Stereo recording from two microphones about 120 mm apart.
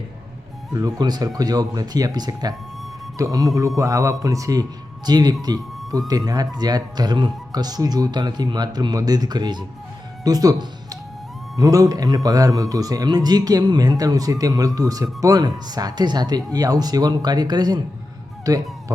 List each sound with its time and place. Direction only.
0.7 s a man's voice: 30° right (ahead or behind)